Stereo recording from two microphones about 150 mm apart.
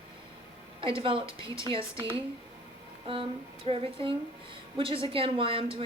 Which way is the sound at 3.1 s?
40° right (ahead or behind).